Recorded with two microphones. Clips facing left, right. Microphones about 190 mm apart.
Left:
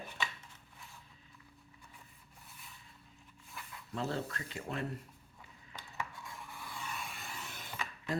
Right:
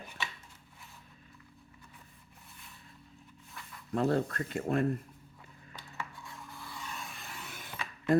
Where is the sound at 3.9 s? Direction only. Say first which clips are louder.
Right 8 dB; 55° right (ahead or behind).